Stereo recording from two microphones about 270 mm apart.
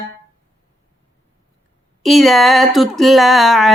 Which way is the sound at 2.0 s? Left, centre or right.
Centre.